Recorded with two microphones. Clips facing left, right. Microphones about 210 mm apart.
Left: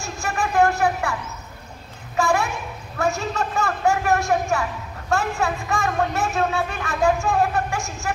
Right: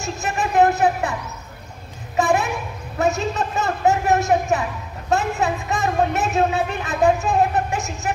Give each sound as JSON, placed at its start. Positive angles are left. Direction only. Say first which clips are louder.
{"t": 0.0, "sound": "speech", "louder": "right 2 dB", "side_deg": -20}
{"t": 2.1, "sound": "a sound", "louder": "right 2 dB", "side_deg": -20}
{"t": 3.0, "sound": "speech", "louder": "right 3 dB", "side_deg": -20}